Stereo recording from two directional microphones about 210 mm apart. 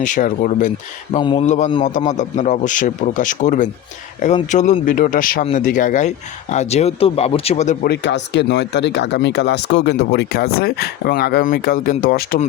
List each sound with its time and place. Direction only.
0.0 s speech: 40° left (ahead or behind)
1.2 s a man's voice: 25° left (ahead or behind)
1.5 s speech: 35° left (ahead or behind)
7.9 s speech: 55° left (ahead or behind)